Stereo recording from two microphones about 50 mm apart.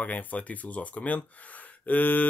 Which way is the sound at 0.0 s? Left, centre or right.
Left.